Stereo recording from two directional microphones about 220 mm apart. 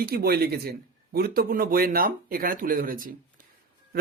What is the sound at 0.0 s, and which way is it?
Speech, 45° right (ahead or behind).